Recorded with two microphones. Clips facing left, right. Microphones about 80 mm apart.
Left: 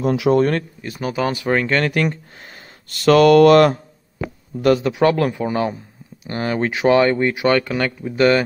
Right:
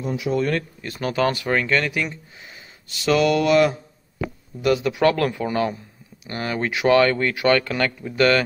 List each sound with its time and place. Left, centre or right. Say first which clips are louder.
0.0 s speech: left 8 dB; left
0.3 s speech: left 6 dB; left
0.8 s speech: right 1 dB; centre; by 2.0 s left
2.0 s speech: left 6 dB; left
4.9 s speech: left 2 dB; left